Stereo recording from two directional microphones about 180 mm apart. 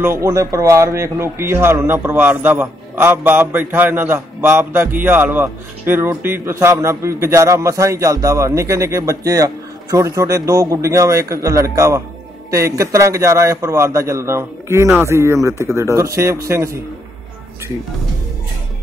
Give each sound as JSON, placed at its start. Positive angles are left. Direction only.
{"t": 0.0, "sound": "speech", "side_deg": -15}